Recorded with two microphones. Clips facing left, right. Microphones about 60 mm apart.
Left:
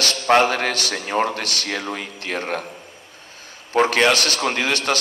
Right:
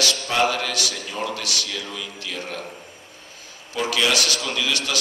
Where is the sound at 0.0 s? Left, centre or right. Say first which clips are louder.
Left 5 dB; left.